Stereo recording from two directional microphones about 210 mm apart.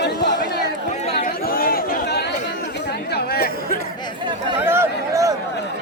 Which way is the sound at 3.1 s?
50° left (ahead or behind).